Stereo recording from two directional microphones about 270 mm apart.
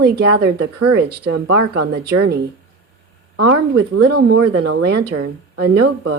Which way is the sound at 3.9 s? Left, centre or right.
Right.